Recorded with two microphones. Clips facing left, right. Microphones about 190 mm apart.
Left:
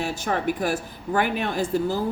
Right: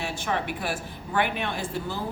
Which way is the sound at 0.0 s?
40° left (ahead or behind).